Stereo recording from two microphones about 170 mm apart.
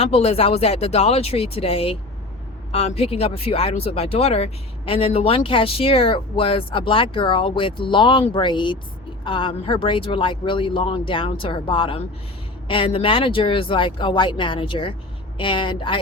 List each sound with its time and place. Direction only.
0.0 s speech: 35° left (ahead or behind)